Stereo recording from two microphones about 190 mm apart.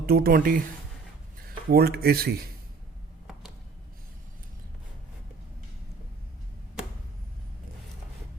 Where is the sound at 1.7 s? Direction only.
55° right (ahead or behind).